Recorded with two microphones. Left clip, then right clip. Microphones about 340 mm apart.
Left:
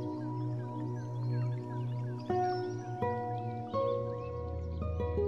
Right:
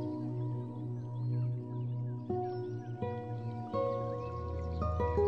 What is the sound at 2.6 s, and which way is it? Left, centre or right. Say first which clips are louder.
Music: left 5 dB; centre.